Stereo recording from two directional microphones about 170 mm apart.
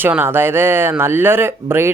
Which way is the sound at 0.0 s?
10° right (ahead or behind).